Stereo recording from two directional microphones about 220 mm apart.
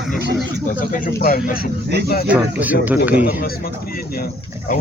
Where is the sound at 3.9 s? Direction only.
40° left (ahead or behind).